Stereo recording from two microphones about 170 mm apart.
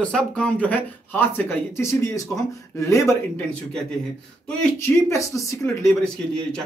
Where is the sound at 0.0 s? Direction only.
5° left (ahead or behind).